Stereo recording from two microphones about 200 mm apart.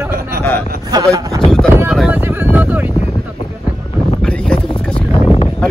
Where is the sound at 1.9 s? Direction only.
5° right (ahead or behind).